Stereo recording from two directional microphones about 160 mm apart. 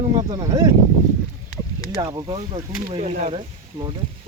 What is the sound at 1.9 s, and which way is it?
Speech, 25° right (ahead or behind).